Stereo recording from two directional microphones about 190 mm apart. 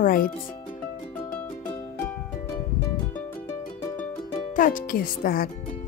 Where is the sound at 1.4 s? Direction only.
10° left (ahead or behind).